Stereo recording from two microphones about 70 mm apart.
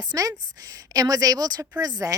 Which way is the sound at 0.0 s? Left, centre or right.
Right.